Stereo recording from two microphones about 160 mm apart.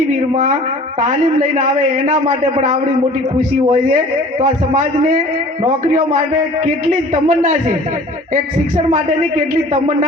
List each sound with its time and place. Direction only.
0.1 s a man's voice: 55° right (ahead or behind)